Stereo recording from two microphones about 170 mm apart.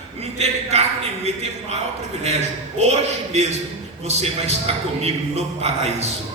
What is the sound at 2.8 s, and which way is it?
A man's voice, 40° right (ahead or behind).